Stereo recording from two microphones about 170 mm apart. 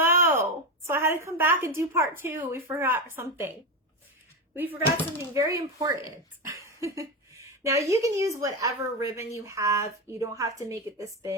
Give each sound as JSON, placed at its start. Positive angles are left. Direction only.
{"t": 0.0, "sound": "speech", "side_deg": -15}
{"t": 6.6, "sound": "a sound", "side_deg": -20}
{"t": 7.6, "sound": "speech", "side_deg": -20}